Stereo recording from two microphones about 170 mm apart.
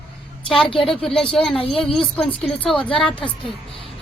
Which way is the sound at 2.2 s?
35° left (ahead or behind).